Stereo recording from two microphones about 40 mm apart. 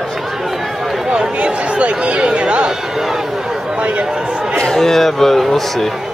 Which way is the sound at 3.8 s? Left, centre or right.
Right.